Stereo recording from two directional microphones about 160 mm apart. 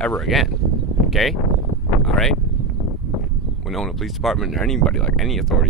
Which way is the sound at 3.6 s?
Centre (ahead or behind).